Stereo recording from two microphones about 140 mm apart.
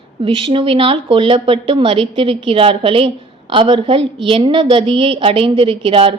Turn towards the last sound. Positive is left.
turn(degrees=-40)  # may be behind; listen again after turning